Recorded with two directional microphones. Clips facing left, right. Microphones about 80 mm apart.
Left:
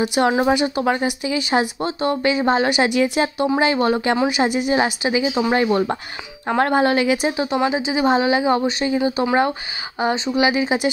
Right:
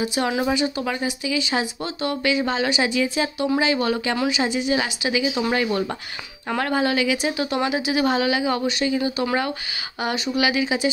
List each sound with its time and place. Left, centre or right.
0.1 s speech: left
4.3 s a woman's voice: left
6.7 s speech: left
7.7 s speech: left
8.1 s speech: left
9.9 s speech: left